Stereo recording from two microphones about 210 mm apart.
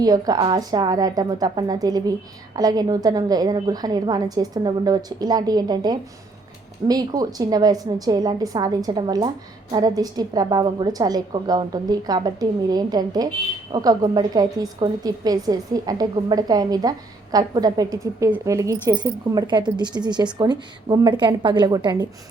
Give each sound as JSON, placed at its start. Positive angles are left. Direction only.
{"t": 0.0, "sound": "a woman's voice", "side_deg": -20}